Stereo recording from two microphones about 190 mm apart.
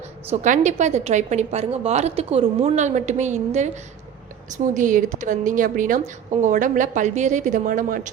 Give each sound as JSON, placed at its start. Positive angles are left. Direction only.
{"t": 0.3, "sound": "a woman's voice", "side_deg": -40}